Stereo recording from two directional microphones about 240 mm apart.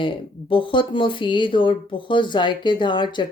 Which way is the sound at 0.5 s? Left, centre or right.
Left.